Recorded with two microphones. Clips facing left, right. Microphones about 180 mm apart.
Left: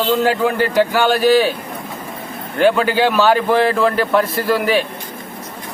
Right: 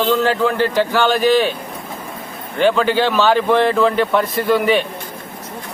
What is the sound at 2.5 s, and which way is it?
Speech, 5° left (ahead or behind).